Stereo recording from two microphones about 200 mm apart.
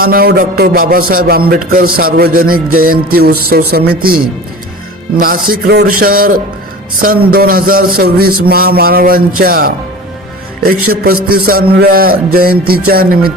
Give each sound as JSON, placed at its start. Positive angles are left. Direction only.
{"t": 0.0, "sound": "speech", "side_deg": -45}
{"t": 5.2, "sound": "speech", "side_deg": -45}